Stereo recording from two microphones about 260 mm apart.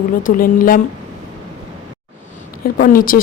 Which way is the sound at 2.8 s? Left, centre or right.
Left.